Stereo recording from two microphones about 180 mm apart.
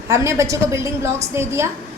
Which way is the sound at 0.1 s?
15° right (ahead or behind).